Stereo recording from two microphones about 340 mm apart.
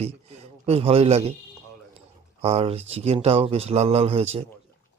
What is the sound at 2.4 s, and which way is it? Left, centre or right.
Speech, centre.